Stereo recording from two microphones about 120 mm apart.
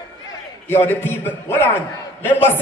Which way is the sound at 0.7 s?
20° left (ahead or behind).